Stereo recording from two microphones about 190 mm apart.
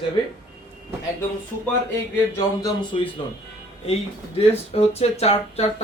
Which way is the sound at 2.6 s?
25° left (ahead or behind).